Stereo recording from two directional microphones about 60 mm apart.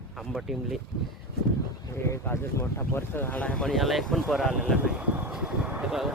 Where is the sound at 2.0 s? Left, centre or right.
Left.